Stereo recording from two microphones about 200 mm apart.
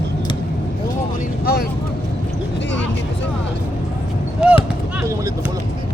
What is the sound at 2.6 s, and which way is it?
Speech, 65° left (ahead or behind).